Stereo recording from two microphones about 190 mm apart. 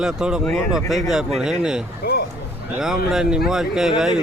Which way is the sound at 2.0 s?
60° left (ahead or behind).